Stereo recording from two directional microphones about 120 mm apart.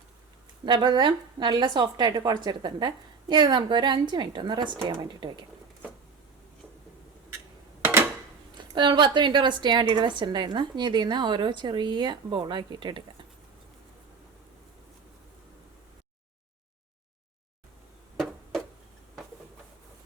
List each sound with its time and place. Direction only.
0.6 s speech: 40° right (ahead or behind)
8.5 s speech: 40° right (ahead or behind)